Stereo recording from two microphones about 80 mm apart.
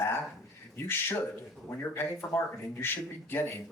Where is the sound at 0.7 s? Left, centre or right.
Left.